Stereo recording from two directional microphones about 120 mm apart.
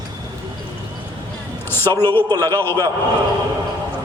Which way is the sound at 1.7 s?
20° left (ahead or behind).